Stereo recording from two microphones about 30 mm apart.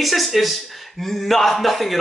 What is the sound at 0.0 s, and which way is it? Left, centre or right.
A man's voice, centre.